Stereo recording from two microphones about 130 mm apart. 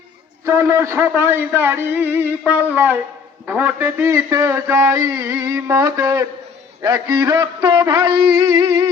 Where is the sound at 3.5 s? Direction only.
15° right (ahead or behind); by 8.7 s 35° right (ahead or behind).